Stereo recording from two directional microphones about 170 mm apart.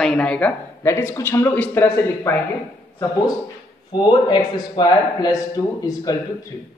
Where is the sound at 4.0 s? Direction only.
25° left (ahead or behind).